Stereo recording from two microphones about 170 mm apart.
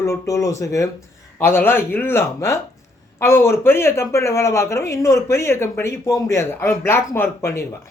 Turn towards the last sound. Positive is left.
turn(degrees=15)  # may be behind; listen again after turning